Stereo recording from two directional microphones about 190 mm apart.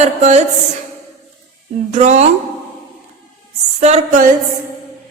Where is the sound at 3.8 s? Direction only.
40° right (ahead or behind).